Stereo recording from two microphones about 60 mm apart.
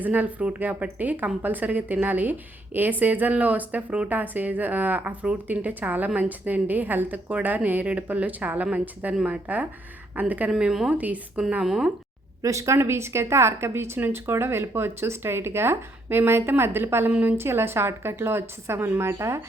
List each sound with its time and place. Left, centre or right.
0.0 s speech: right
10.6 s speech: centre
10.9 s speech: right
11.6 s speech: centre
12.4 s speech: right
17.1 s speech: right
17.3 s a woman's voice: right